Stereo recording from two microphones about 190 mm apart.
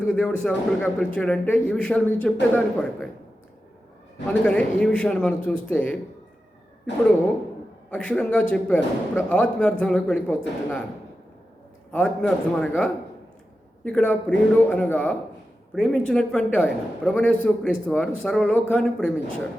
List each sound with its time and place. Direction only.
0.0 s a man's voice: 5° left (ahead or behind)
4.4 s speech: 5° left (ahead or behind)
6.9 s speech: 65° left (ahead or behind)
7.9 s a man's voice: 5° left (ahead or behind)
11.9 s a man's voice: 5° left (ahead or behind)